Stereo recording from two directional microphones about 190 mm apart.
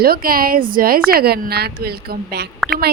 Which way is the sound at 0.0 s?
50° right (ahead or behind).